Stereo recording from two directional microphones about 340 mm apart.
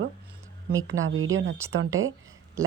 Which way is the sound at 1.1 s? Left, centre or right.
Right.